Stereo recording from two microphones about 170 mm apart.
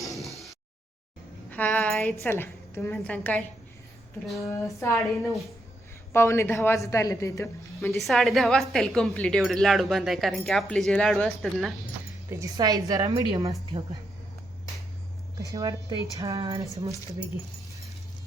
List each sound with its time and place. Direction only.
0.0 s a sound: centre (ahead or behind)
2.2 s a woman's voice: 15° left (ahead or behind)
4.8 s a woman's voice: 15° left (ahead or behind)
6.1 s a woman's voice: 15° left (ahead or behind)
7.9 s speech: centre (ahead or behind)
12.3 s a woman's voice: 20° right (ahead or behind)
15.4 s a woman's voice: 20° right (ahead or behind)